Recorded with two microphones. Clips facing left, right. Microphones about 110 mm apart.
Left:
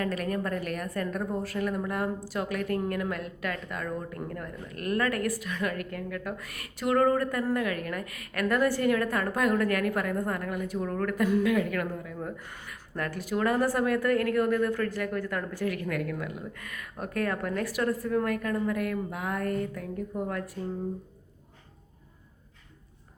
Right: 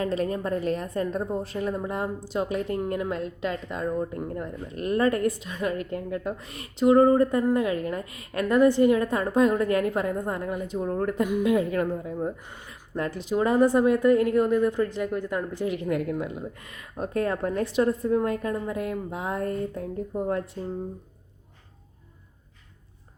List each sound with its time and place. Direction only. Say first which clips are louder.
0.0 s a woman's voice: right 3 dB; 25° right (ahead or behind)